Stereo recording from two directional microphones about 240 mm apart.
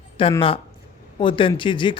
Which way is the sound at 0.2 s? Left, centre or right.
Left.